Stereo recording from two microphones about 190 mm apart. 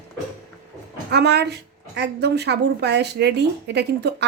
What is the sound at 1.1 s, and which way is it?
A woman's voice, 60° right (ahead or behind).